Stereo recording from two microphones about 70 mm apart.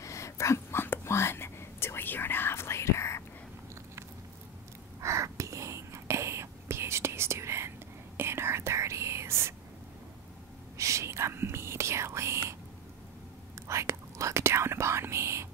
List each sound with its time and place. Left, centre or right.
0.0 s whispering: left
5.0 s whispering: right
10.8 s whispering: right
13.7 s whispering: right